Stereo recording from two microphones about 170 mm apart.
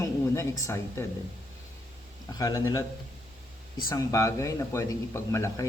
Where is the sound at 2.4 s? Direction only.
20° left (ahead or behind).